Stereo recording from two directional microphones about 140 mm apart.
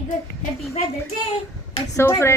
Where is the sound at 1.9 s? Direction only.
20° left (ahead or behind).